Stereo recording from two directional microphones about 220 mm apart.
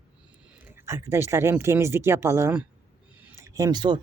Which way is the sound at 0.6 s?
10° right (ahead or behind).